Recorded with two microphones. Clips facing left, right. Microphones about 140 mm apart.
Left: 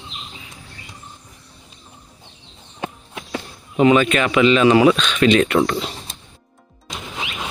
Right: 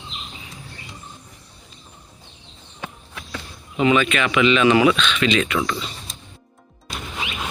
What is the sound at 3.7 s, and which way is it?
Speech, 35° left (ahead or behind).